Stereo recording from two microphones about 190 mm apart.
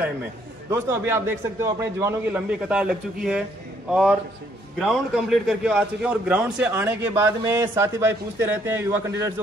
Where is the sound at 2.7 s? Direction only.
5° right (ahead or behind).